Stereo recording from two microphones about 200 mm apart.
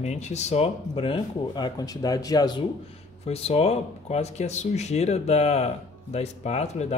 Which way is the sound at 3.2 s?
30° left (ahead or behind).